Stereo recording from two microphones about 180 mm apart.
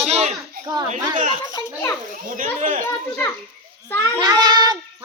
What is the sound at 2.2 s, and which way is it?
Speech, 50° right (ahead or behind).